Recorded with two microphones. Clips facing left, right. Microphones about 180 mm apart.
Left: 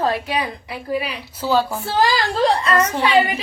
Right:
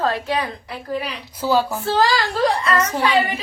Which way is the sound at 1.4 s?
10° right (ahead or behind).